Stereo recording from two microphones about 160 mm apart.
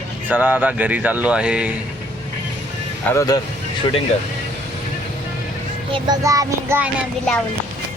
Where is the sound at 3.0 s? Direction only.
20° left (ahead or behind).